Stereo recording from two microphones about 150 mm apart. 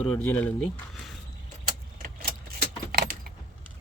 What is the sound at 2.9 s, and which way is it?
Keys jangling, 75° right (ahead or behind).